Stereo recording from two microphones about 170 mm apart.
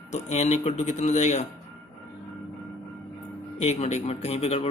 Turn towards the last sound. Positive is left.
turn(degrees=35)  # may be behind; listen again after turning